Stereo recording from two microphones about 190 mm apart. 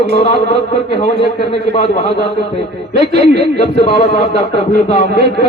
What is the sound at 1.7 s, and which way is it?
Speech, 35° left (ahead or behind).